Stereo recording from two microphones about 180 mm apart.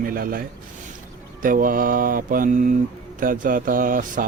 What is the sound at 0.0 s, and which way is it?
Speech, 50° right (ahead or behind).